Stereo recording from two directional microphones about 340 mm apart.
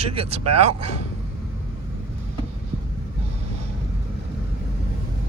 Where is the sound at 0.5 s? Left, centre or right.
Right.